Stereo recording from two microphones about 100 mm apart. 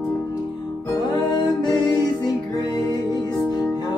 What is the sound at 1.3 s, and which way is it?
Music, 45° left (ahead or behind).